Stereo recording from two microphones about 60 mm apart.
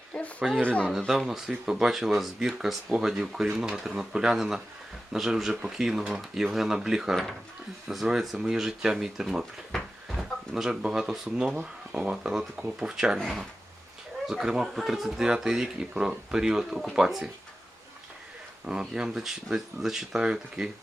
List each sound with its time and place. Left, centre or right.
0.1 s speech: left
0.9 s speech: centre
11.4 s speech: right
13.1 s speech: centre
18.6 s speech: centre